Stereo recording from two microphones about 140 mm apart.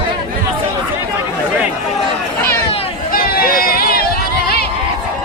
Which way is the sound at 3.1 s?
90° left.